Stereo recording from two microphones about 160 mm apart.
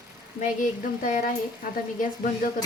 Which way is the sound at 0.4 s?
55° left (ahead or behind).